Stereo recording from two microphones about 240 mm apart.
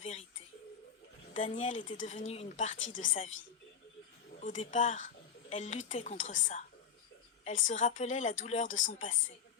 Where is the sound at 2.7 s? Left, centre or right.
Left.